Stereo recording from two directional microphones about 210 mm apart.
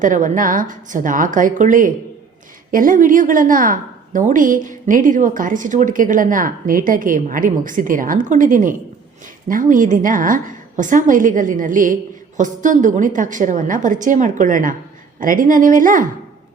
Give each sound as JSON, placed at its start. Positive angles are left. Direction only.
{"t": 0.0, "sound": "a woman's voice", "side_deg": -40}